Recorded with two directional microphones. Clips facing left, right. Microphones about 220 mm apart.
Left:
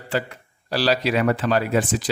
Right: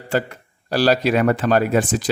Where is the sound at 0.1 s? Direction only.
45° right (ahead or behind).